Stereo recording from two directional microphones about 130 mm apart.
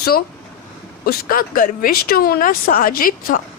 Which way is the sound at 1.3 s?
90° left.